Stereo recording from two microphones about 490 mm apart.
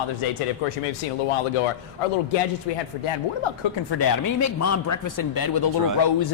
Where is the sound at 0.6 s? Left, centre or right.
Left.